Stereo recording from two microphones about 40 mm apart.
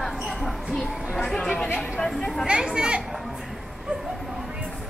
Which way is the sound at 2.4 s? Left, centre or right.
Right.